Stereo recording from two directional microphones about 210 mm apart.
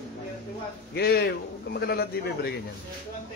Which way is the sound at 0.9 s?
50° left (ahead or behind).